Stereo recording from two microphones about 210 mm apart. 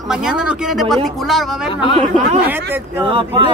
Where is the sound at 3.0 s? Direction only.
25° right (ahead or behind).